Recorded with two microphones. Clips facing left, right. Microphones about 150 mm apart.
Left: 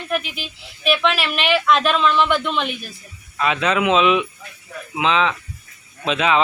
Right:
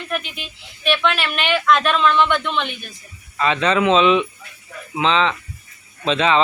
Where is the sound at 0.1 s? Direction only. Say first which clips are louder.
Left 4 dB; 5° left (ahead or behind).